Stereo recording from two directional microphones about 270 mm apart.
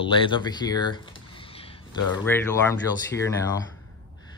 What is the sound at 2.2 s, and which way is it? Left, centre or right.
Speech, centre.